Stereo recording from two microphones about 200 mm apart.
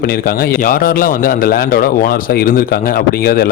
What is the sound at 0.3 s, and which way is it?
A man's voice, 45° left (ahead or behind).